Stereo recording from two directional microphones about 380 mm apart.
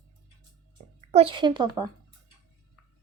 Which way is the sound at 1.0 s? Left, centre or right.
Centre.